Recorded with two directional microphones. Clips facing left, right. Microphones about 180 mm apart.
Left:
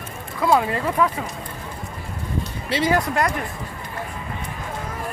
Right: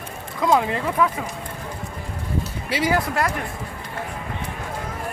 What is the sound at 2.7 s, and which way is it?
Speech, 10° right (ahead or behind).